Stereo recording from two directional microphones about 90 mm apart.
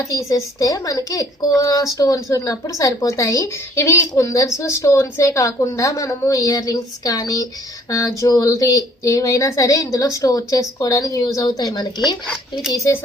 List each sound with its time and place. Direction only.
0.1 s a woman's voice: 40° left (ahead or behind)